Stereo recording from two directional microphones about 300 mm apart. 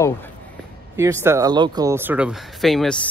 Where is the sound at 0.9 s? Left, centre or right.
Centre.